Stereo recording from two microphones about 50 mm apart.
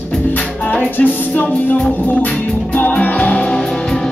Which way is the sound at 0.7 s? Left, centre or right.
Left.